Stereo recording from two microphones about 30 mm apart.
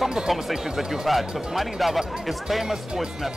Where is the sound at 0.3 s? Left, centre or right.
Centre.